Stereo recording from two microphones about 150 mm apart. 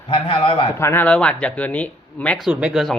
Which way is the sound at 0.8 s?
15° left (ahead or behind).